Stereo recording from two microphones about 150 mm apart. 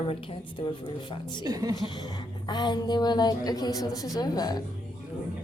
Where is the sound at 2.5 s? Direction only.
30° left (ahead or behind).